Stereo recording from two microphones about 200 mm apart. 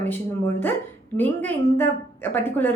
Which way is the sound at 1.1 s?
10° left (ahead or behind).